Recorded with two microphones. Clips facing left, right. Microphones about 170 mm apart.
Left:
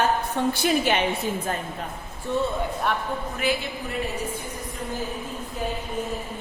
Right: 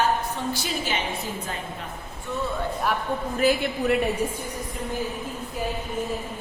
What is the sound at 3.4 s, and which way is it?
Speech, 40° right (ahead or behind).